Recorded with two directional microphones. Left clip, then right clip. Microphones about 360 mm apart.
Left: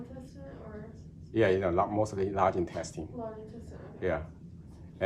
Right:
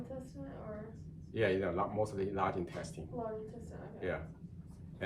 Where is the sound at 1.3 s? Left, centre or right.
Centre.